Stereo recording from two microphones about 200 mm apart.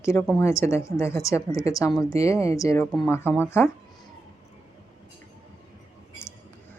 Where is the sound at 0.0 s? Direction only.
15° left (ahead or behind).